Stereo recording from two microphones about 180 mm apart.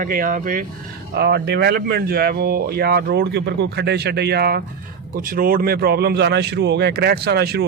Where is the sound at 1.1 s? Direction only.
65° right (ahead or behind).